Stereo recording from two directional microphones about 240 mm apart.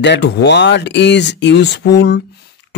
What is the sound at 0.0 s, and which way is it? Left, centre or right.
Speech, left.